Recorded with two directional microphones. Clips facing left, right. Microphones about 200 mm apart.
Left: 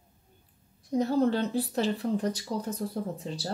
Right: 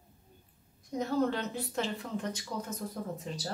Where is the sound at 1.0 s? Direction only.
35° left (ahead or behind).